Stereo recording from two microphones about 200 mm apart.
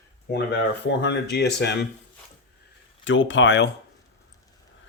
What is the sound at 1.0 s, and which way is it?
Speech, 60° left (ahead or behind).